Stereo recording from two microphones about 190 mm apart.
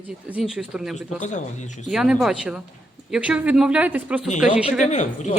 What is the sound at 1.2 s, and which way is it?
Speech, 40° left (ahead or behind).